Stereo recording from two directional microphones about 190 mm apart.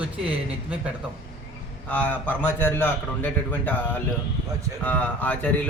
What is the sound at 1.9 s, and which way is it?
A man's voice, 10° left (ahead or behind).